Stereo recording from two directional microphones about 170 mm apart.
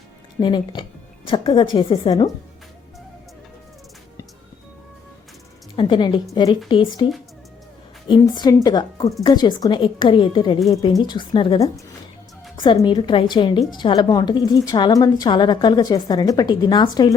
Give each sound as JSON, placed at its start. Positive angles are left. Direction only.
{"t": 0.3, "sound": "a woman's voice", "side_deg": 25}
{"t": 5.7, "sound": "a woman's voice", "side_deg": 30}